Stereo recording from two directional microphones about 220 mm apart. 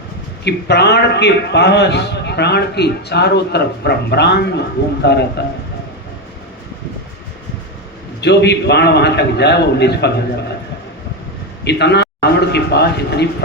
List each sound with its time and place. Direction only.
0.4 s a man's voice: 50° left (ahead or behind)
8.2 s a man's voice: 50° left (ahead or behind)
11.6 s a man's voice: 50° left (ahead or behind)